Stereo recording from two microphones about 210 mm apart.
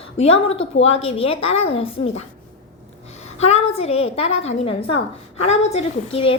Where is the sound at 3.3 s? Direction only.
30° left (ahead or behind).